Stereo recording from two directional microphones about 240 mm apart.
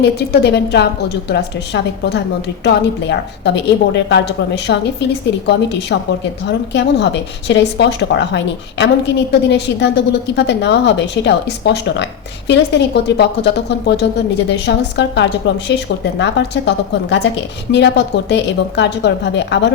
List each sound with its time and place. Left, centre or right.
0.0 s a woman's voice: left